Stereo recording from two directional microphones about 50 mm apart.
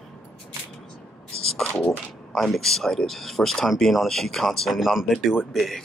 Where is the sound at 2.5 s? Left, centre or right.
Centre.